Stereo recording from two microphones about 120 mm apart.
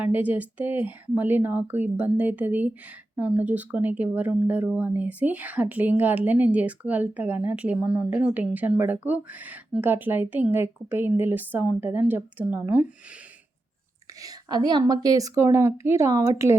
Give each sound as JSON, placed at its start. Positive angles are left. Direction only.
{"t": 0.0, "sound": "speech", "side_deg": -15}
{"t": 14.2, "sound": "speech", "side_deg": -30}